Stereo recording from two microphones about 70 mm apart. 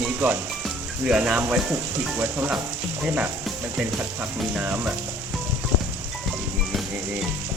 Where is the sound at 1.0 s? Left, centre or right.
Centre.